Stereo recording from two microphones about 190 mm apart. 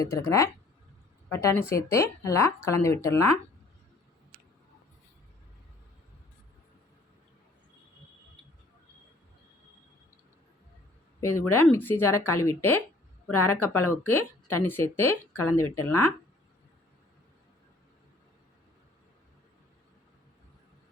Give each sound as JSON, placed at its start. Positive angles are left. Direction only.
{"t": 0.0, "sound": "speech", "side_deg": 15}
{"t": 11.3, "sound": "speech", "side_deg": 10}